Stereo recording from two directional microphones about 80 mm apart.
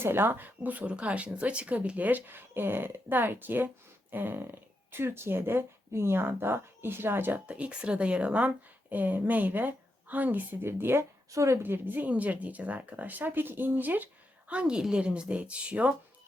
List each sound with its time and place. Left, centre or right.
0.0 s speech: right
11.6 s speech: right